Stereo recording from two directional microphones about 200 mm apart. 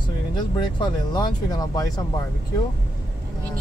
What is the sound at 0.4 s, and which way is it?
Speech, 20° left (ahead or behind).